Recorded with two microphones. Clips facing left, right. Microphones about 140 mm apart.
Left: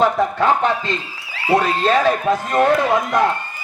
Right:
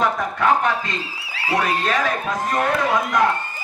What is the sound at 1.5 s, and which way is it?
A man's voice, 30° left (ahead or behind).